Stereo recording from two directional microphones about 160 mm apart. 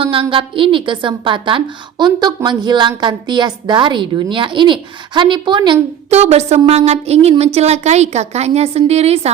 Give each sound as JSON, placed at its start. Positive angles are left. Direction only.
{"t": 0.0, "sound": "a woman's voice", "side_deg": -35}
{"t": 6.1, "sound": "a woman's voice", "side_deg": -40}